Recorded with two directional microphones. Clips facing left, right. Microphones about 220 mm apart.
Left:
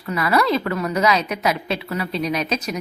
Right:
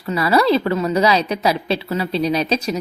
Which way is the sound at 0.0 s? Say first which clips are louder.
Right 3 dB; 30° right (ahead or behind).